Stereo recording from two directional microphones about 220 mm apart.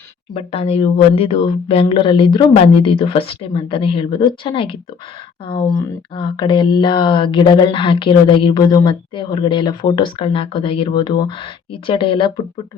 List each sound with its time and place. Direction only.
0.3 s speech: 25° left (ahead or behind)
6.1 s speech: 20° left (ahead or behind)